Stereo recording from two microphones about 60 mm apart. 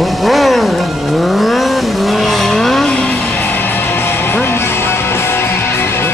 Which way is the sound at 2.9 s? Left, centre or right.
Left.